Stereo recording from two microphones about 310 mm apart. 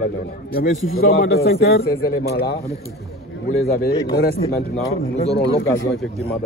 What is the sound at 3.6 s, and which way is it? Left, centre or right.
Speech, left.